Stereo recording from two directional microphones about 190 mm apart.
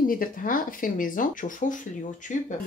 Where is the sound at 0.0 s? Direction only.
45° left (ahead or behind).